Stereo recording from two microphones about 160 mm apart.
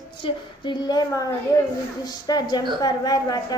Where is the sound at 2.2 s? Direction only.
25° left (ahead or behind).